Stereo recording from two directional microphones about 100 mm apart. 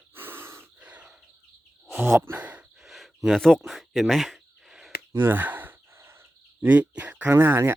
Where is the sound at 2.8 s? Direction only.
Centre (ahead or behind).